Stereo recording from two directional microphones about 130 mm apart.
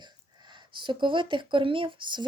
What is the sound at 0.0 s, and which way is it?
Speech, 35° right (ahead or behind).